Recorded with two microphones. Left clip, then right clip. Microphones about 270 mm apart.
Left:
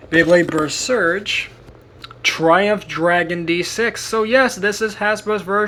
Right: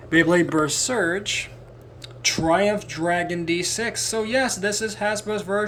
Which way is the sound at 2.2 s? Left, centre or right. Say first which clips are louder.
Left 6 dB; centre.